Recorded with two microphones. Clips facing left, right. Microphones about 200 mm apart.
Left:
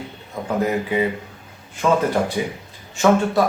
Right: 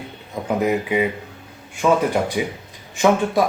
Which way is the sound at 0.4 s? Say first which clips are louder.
Right 1 dB; 15° right (ahead or behind).